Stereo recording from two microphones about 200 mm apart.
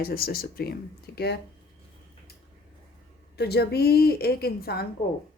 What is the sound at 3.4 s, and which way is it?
Speech, 55° left (ahead or behind).